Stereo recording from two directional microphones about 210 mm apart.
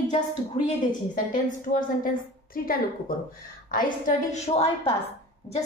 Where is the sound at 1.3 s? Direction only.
40° left (ahead or behind).